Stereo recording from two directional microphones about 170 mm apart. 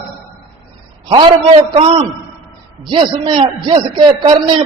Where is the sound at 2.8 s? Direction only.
30° right (ahead or behind).